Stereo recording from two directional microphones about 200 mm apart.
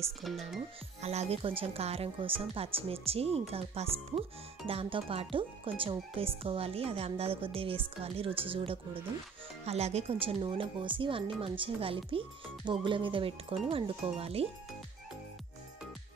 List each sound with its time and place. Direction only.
0.2 s speech: centre (ahead or behind)
1.0 s speech: 30° right (ahead or behind)